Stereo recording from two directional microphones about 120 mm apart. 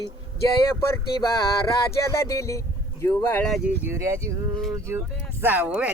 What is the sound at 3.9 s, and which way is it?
Speech, 25° right (ahead or behind).